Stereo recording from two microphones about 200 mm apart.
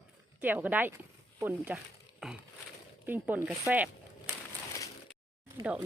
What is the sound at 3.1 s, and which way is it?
Speech, 10° right (ahead or behind).